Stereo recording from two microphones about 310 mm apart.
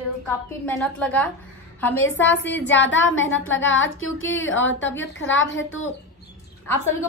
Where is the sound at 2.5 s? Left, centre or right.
Left.